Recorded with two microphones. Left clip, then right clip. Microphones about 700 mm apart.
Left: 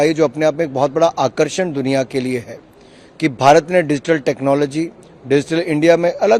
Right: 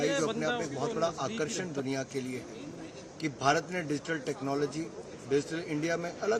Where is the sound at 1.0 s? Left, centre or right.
Left.